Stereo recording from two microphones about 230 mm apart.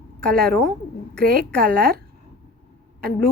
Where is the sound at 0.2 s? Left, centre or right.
Centre.